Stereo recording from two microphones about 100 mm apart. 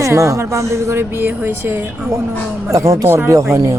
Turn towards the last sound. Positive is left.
turn(degrees=-30)  # may be behind; listen again after turning